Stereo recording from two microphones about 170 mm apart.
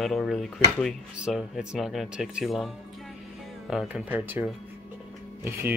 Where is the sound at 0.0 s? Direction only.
Centre (ahead or behind).